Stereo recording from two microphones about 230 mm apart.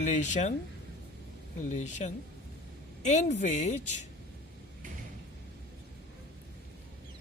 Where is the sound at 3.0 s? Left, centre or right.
Left.